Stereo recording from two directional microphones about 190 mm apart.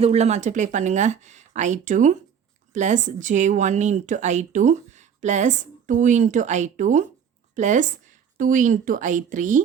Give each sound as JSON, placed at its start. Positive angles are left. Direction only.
{"t": 0.0, "sound": "a woman's voice", "side_deg": -35}